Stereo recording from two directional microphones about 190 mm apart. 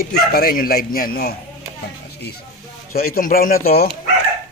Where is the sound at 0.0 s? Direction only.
55° left (ahead or behind).